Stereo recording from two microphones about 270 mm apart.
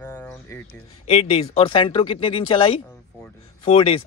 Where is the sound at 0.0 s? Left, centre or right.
Centre.